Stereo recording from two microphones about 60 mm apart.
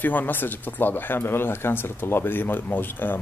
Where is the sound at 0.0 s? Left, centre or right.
Left.